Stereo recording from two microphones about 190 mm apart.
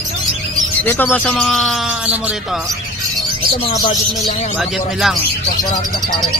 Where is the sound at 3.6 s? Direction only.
25° left (ahead or behind).